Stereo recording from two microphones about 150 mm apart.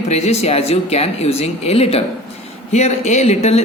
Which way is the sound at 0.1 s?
45° left (ahead or behind).